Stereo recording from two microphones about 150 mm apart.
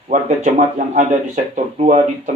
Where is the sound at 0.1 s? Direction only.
55° right (ahead or behind).